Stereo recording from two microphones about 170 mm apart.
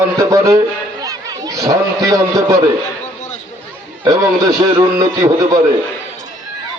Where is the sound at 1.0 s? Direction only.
20° right (ahead or behind).